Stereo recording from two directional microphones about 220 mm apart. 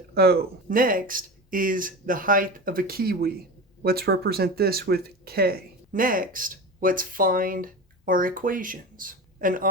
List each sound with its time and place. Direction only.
0.1 s speech: 45° right (ahead or behind)